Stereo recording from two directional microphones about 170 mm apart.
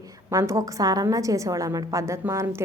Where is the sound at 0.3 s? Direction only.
20° right (ahead or behind).